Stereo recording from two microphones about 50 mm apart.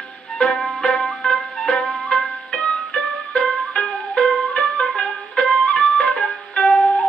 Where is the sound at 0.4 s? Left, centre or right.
Centre.